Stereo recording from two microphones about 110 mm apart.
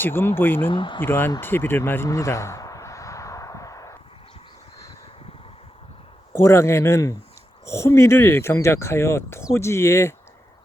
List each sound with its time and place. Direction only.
0.0 s speech: 20° left (ahead or behind)
0.7 s speech: 50° left (ahead or behind)
1.0 s speech: 20° left (ahead or behind)
1.4 s a sound: 20° left (ahead or behind)
6.4 s speech: 25° left (ahead or behind)